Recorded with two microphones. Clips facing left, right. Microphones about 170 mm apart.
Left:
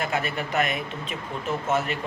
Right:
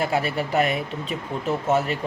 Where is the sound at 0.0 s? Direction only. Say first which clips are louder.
Right 4 dB; 35° right (ahead or behind).